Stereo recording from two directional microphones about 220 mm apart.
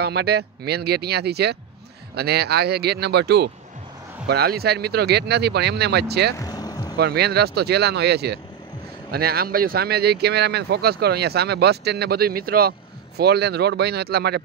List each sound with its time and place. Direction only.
0.0 s speech: 50° right (ahead or behind)
6.3 s music: 15° left (ahead or behind)
7.0 s speech: 50° right (ahead or behind)